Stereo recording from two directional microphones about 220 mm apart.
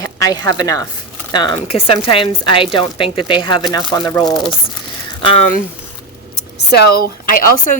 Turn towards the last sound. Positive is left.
turn(degrees=40)  # may be behind; listen again after turning